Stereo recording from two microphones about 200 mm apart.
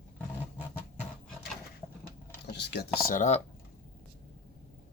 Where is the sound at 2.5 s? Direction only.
55° left (ahead or behind); by 3.4 s 40° left (ahead or behind).